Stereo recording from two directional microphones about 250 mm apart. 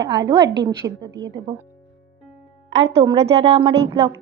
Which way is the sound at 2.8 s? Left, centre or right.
Right.